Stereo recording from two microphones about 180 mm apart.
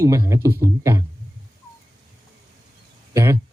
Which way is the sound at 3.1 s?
15° right (ahead or behind).